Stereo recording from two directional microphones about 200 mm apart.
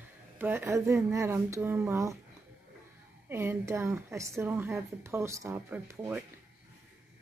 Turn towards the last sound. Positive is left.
turn(degrees=-10)  # may be behind; listen again after turning